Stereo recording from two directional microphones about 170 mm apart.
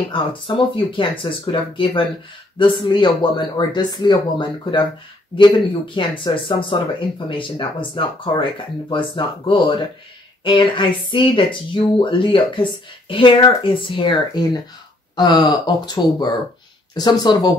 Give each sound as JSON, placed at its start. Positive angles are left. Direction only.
{"t": 0.1, "sound": "speech", "side_deg": 30}
{"t": 5.9, "sound": "speech", "side_deg": 30}